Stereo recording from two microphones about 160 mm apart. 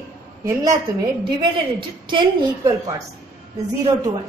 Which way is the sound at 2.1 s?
25° right (ahead or behind).